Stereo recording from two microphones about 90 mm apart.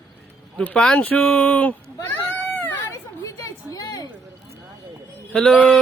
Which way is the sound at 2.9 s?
40° left (ahead or behind).